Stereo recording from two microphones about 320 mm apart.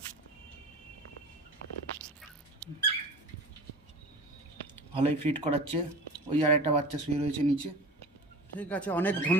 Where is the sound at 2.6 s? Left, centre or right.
Centre.